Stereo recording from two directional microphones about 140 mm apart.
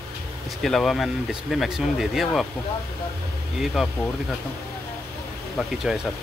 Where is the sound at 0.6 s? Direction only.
Centre (ahead or behind).